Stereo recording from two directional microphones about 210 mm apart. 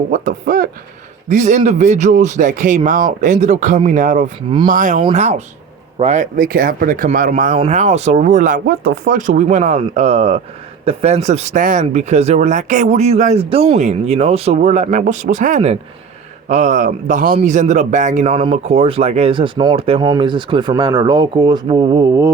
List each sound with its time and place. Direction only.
0.1 s speech: 40° right (ahead or behind); by 22.3 s 15° right (ahead or behind)